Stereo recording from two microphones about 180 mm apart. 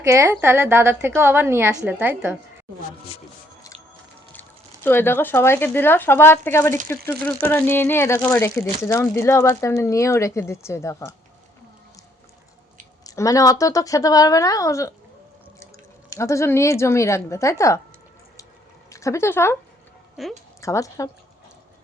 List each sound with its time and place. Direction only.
0.0 s a woman's voice: 15° right (ahead or behind)
4.3 s speech: 10° left (ahead or behind)
13.1 s speech: 20° left (ahead or behind)
16.0 s speech: 15° left (ahead or behind)
18.9 s speech: 15° left (ahead or behind)
20.2 s a woman's voice: centre (ahead or behind)
20.6 s speech: 15° left (ahead or behind)